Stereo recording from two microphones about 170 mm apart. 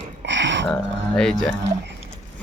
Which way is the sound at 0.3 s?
90° right.